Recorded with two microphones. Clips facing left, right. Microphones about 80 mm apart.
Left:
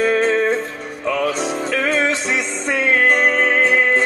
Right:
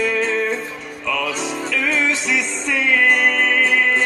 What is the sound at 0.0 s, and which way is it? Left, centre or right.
Music, left.